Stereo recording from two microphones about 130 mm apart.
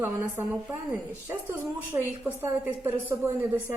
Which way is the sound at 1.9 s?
15° right (ahead or behind).